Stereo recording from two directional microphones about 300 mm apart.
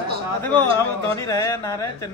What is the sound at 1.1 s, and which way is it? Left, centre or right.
Speech, centre.